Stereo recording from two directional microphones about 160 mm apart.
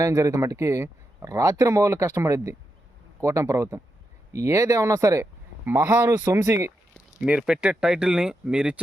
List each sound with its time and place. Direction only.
0.0 s speech: 20° right (ahead or behind)
7.2 s speech: 5° right (ahead or behind)